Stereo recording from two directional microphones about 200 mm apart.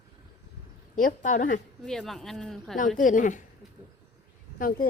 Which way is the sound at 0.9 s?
40° left (ahead or behind).